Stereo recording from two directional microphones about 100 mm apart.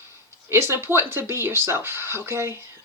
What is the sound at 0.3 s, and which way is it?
Speech, 25° right (ahead or behind).